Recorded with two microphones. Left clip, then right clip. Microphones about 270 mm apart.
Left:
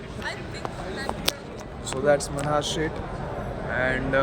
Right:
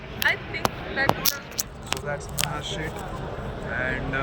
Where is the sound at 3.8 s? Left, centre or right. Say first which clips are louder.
Left 5 dB; centre.